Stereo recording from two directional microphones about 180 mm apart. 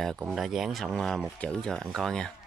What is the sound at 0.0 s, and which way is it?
Speech, centre (ahead or behind).